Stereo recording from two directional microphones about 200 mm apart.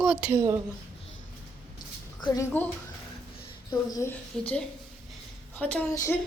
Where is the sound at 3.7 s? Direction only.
15° left (ahead or behind).